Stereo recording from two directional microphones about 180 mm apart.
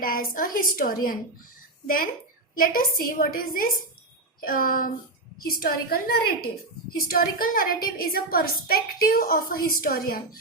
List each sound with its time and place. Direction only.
0.0 s a woman's voice: 50° left (ahead or behind)
2.6 s a woman's voice: 50° left (ahead or behind)